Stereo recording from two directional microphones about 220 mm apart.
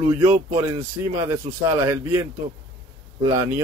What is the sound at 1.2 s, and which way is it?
Speech, 15° right (ahead or behind).